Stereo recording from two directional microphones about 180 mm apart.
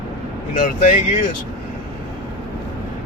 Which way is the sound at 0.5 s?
45° left (ahead or behind).